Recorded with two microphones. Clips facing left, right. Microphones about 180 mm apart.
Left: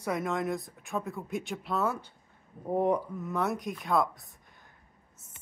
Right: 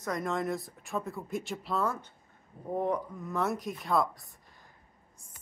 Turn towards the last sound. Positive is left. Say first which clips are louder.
# left 1 dB
turn(degrees=0)  # may be behind; listen again after turning